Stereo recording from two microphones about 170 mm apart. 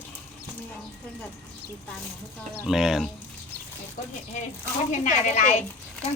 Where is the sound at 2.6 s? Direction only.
Centre (ahead or behind).